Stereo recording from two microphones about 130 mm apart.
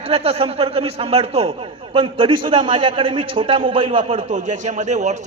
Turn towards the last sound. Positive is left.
turn(degrees=-65)  # may be behind; listen again after turning